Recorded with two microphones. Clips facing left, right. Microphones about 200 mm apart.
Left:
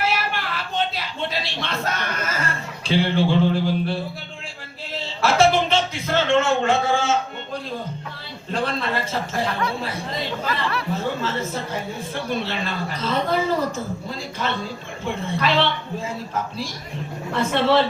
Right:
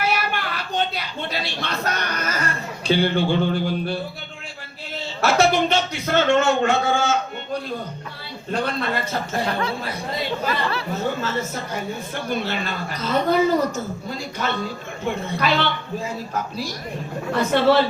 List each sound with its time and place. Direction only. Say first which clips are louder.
0.0 s a sound: right 1 dB; 30° left (ahead or behind)
3.4 s mantra: left 2 dB; 30° left (ahead or behind)
4.9 s speech: even; 30° left (ahead or behind)
9.5 s speech: right 1 dB; 30° right (ahead or behind)
10.9 s speech: right 2 dB; 30° left (ahead or behind)